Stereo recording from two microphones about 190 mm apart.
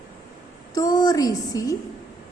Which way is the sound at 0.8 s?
20° left (ahead or behind).